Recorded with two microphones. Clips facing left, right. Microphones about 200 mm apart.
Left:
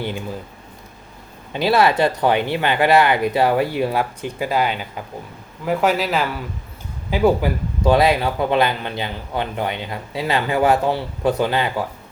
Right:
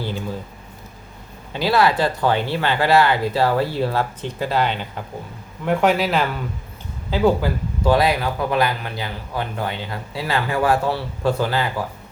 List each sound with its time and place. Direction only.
1.5 s a man's voice: 20° left (ahead or behind); by 6.4 s centre (ahead or behind)
7.1 s speech: 20° left (ahead or behind)